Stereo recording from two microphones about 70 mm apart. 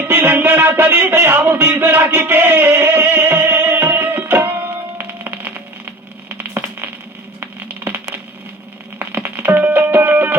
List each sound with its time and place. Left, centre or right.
0.0 s music: right
4.9 s a sound: right
9.0 s music: right